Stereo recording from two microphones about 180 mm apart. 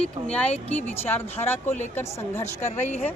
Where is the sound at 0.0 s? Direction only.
5° left (ahead or behind).